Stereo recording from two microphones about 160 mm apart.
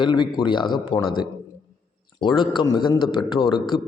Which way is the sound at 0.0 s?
30° left (ahead or behind).